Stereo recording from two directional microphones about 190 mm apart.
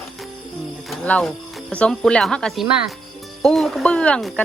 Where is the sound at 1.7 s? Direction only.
5° left (ahead or behind).